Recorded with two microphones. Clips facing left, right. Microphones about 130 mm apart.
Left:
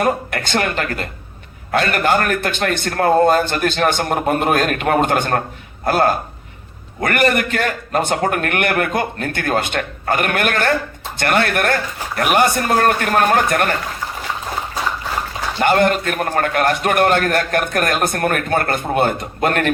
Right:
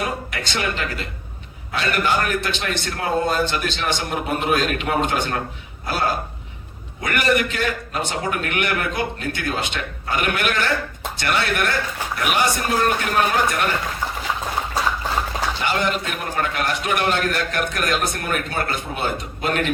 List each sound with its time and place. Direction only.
0.0 s a man's voice: 55° left (ahead or behind)
15.5 s a man's voice: 50° left (ahead or behind)